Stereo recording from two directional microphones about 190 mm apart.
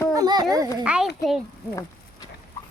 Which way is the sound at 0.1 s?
20° right (ahead or behind).